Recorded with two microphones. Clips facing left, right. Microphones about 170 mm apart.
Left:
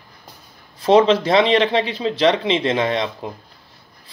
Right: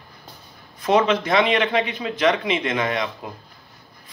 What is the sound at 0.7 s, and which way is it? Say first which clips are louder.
Speech: left 5 dB; 30° left (ahead or behind).